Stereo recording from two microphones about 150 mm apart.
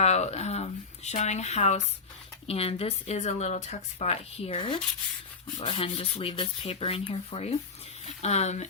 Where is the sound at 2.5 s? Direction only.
40° left (ahead or behind).